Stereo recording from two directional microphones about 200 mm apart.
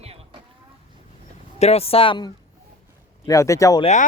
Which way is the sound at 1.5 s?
30° left (ahead or behind).